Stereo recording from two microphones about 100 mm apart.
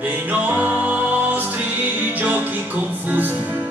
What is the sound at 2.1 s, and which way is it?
Music, 15° right (ahead or behind).